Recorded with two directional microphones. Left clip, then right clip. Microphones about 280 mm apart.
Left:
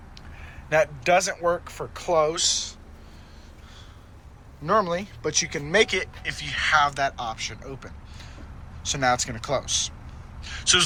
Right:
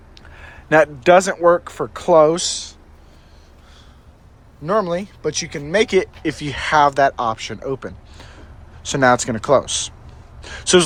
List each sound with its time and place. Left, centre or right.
0.3 s speech: right
2.4 s speech: centre
4.6 s speech: centre; by 9.8 s right